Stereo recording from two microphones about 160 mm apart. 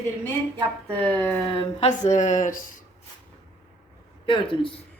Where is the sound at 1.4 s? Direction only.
35° left (ahead or behind).